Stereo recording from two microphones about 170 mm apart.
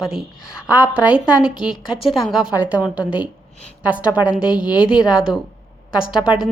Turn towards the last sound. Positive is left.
turn(degrees=-5)  # may be behind; listen again after turning